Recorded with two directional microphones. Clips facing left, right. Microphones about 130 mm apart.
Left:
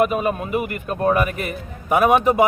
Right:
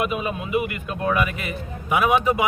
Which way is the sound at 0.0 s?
45° left (ahead or behind).